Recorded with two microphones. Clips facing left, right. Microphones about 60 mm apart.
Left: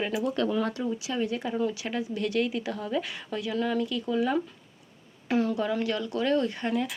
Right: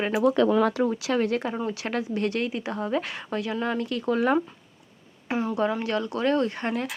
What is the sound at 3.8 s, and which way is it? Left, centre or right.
Speech, right.